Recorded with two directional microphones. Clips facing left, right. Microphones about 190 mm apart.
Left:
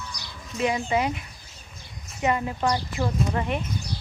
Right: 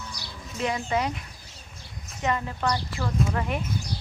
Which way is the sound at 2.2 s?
15° left (ahead or behind).